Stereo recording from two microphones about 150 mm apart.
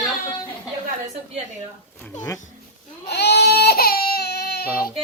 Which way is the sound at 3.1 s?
90° left.